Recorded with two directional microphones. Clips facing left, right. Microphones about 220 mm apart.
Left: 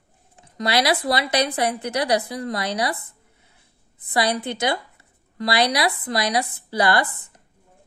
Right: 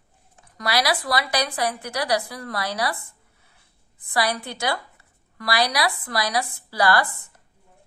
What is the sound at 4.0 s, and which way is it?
A woman's voice, 20° left (ahead or behind).